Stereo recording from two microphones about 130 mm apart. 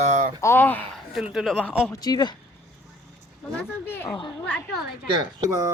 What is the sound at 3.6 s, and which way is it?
Speech, 20° left (ahead or behind).